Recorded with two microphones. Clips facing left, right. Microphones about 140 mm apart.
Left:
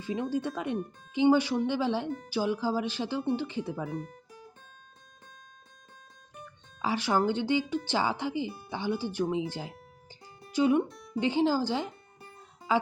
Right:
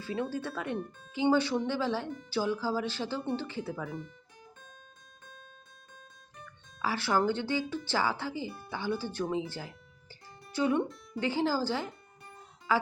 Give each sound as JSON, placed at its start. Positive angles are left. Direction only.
{"t": 0.0, "sound": "speech", "side_deg": 15}
{"t": 3.9, "sound": "speech", "side_deg": 45}
{"t": 6.3, "sound": "music", "side_deg": 15}
{"t": 7.3, "sound": "speech", "side_deg": 15}
{"t": 12.7, "sound": "music", "side_deg": 20}